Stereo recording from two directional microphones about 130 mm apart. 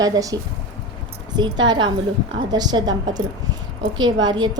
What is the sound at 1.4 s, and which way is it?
A woman's voice, 35° right (ahead or behind).